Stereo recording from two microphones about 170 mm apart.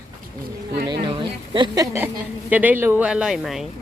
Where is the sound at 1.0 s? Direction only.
30° right (ahead or behind).